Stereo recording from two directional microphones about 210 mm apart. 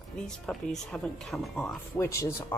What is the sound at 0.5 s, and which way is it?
Speech, 5° left (ahead or behind).